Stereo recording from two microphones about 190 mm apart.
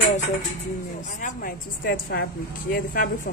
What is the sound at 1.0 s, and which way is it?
A woman's voice, 45° left (ahead or behind).